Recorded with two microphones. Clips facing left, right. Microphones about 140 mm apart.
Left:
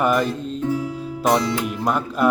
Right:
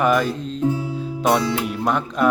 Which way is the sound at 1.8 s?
5° left (ahead or behind).